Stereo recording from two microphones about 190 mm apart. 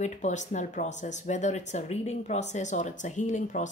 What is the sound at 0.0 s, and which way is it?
Speech, 40° left (ahead or behind).